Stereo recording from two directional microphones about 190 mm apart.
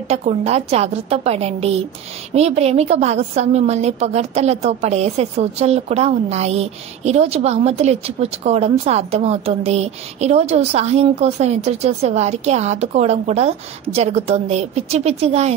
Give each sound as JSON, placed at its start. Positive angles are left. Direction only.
{"t": 0.1, "sound": "a woman's voice", "side_deg": -35}